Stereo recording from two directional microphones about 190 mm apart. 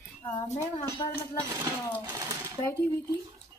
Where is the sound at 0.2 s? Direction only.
30° left (ahead or behind).